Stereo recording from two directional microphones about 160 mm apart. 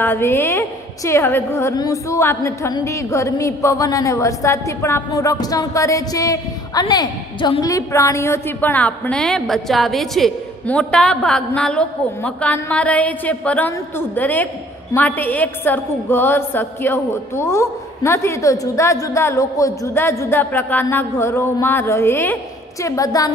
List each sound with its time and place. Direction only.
0.0 s a woman's voice: 15° left (ahead or behind)